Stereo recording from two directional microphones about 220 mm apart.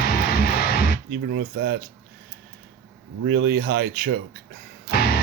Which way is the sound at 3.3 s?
45° right (ahead or behind).